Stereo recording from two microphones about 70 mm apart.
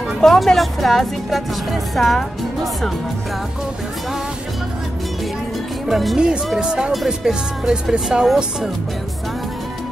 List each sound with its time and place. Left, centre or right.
0.2 s speech: centre
5.9 s speech: centre
6.1 s speech: centre